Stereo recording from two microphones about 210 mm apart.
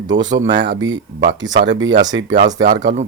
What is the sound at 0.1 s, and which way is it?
Speech, 60° right (ahead or behind).